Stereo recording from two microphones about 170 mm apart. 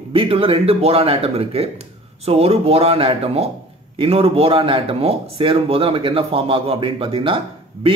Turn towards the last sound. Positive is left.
turn(degrees=-30)  # may be behind; listen again after turning